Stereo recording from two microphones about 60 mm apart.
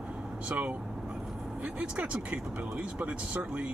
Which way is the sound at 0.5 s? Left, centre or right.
Right.